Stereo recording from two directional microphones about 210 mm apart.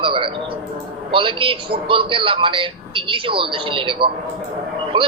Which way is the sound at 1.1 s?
25° right (ahead or behind).